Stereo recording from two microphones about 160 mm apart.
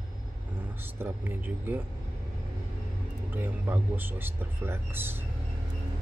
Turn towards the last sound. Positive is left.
turn(degrees=-15)  # may be behind; listen again after turning